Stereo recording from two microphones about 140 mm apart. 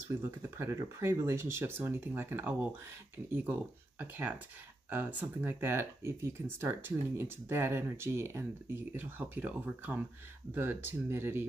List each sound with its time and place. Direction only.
0.1 s speech: 15° right (ahead or behind)
4.0 s speech: 10° right (ahead or behind)